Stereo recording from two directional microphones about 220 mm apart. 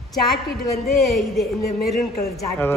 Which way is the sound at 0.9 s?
Centre (ahead or behind).